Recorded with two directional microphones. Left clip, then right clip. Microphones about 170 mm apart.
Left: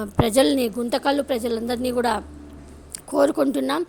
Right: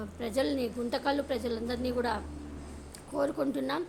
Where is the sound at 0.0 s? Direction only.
50° left (ahead or behind).